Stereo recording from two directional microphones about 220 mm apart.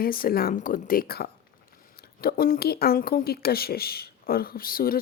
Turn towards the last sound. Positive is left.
turn(degrees=40)  # may be behind; listen again after turning